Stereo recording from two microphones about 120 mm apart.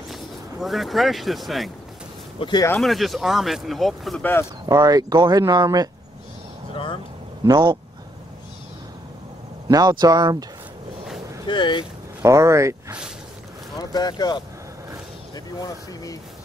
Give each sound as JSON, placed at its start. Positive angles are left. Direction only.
{"t": 0.1, "sound": "speech", "side_deg": 0}
{"t": 2.8, "sound": "speech", "side_deg": 0}
{"t": 4.2, "sound": "speech", "side_deg": 15}
{"t": 4.6, "sound": "speech", "side_deg": -35}
{"t": 6.7, "sound": "vehicle", "side_deg": 45}
{"t": 7.4, "sound": "speech", "side_deg": -40}
{"t": 9.7, "sound": "speech", "side_deg": -35}
{"t": 11.4, "sound": "speech", "side_deg": 40}
{"t": 12.2, "sound": "speech", "side_deg": -25}
{"t": 13.7, "sound": "speech", "side_deg": 35}